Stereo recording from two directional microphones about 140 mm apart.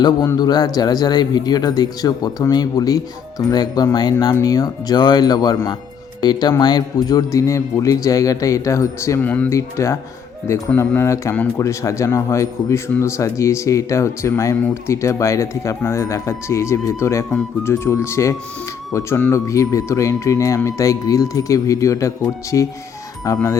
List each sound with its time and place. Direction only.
0.0 s speech: 30° left (ahead or behind); by 9.5 s 10° left (ahead or behind)
9.5 s speech: 20° left (ahead or behind)